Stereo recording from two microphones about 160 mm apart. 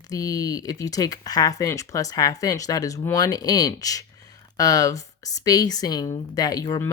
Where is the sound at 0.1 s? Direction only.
20° left (ahead or behind).